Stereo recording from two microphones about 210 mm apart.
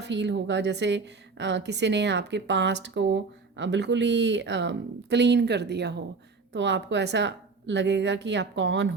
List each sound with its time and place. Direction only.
0.0 s a woman's voice: 55° right (ahead or behind)